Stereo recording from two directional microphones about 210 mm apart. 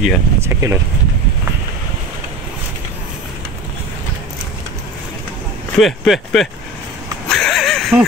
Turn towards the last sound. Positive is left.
turn(degrees=0)  # may be behind; listen again after turning